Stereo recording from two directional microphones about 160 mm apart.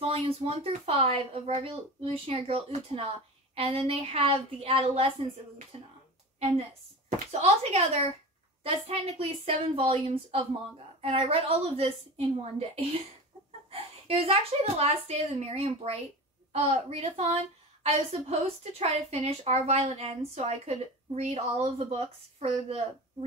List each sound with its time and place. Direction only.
0.0 s speech: 40° right (ahead or behind)
7.1 s speech: 45° right (ahead or behind)